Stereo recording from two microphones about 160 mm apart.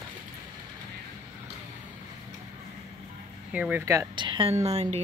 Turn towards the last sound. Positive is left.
turn(degrees=-45)  # may be behind; listen again after turning